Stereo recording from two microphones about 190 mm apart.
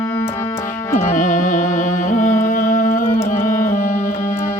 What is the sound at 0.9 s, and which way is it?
Music, 40° left (ahead or behind).